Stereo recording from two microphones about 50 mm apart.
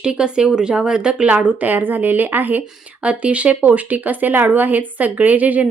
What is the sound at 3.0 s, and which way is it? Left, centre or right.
Speech, right.